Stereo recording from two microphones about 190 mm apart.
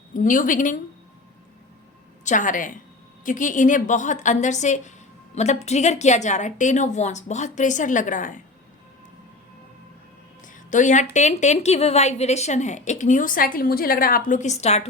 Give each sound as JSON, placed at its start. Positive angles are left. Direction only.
{"t": 0.1, "sound": "a woman's voice", "side_deg": 45}
{"t": 2.2, "sound": "a woman's voice", "side_deg": 45}
{"t": 10.4, "sound": "a sound", "side_deg": 40}
{"t": 11.1, "sound": "a woman's voice", "side_deg": 40}